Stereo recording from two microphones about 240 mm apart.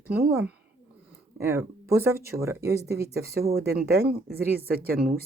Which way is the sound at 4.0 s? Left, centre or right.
Right.